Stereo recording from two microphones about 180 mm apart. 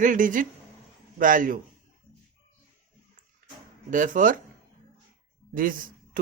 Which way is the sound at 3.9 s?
45° right (ahead or behind).